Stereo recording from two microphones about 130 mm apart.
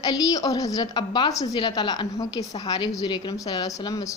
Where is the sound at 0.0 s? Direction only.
30° left (ahead or behind).